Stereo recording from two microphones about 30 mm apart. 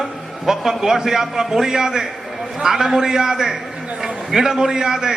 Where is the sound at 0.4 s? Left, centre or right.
Centre.